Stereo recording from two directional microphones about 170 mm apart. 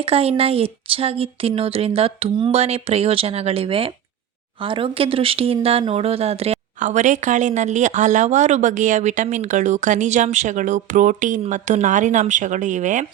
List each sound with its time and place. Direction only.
0.1 s a woman's voice: 35° right (ahead or behind)